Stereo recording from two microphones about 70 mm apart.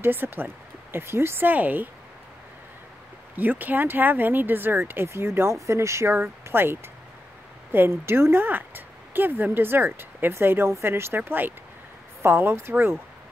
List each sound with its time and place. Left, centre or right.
0.0 s speech: right
3.3 s speech: right